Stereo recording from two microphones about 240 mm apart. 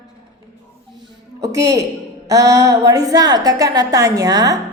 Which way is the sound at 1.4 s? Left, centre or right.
Centre.